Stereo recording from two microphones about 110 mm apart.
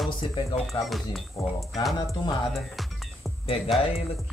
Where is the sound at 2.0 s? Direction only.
35° left (ahead or behind).